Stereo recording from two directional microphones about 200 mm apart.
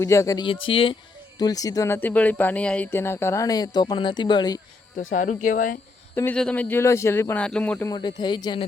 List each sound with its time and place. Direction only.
0.0 s speech: 15° left (ahead or behind)
4.9 s speech: 40° left (ahead or behind)
6.1 s speech: 5° left (ahead or behind)
7.9 s speech: 20° left (ahead or behind)